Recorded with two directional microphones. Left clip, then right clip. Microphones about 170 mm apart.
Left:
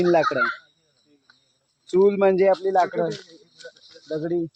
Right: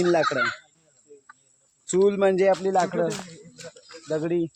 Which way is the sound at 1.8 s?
30° left (ahead or behind).